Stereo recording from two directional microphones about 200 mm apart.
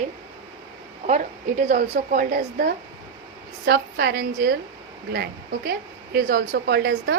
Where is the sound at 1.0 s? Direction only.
40° right (ahead or behind).